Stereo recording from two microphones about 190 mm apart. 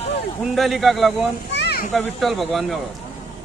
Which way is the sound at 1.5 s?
60° left (ahead or behind).